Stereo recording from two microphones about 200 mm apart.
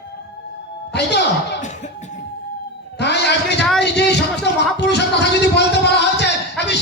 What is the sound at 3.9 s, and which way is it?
Music, 60° left (ahead or behind).